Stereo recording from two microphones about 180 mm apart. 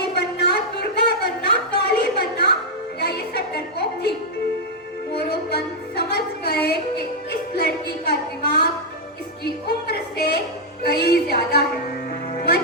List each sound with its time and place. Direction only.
0.0 s a sound: 65° left (ahead or behind)
3.0 s music: 65° left (ahead or behind)
5.2 s music: 60° left (ahead or behind)